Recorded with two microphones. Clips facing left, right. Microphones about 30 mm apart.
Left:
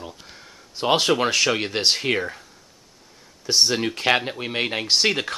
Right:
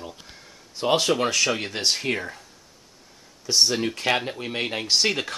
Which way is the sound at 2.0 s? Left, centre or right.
Left.